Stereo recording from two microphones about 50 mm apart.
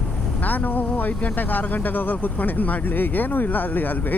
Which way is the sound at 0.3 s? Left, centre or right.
Left.